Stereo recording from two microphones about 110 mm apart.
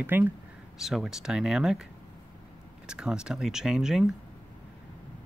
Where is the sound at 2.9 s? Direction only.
5° right (ahead or behind).